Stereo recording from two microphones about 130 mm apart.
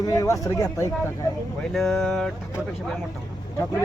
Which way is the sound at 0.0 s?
25° left (ahead or behind).